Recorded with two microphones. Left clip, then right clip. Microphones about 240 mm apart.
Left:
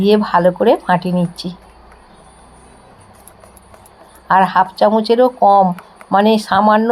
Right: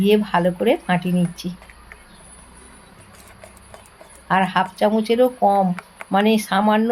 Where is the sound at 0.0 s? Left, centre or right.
Centre.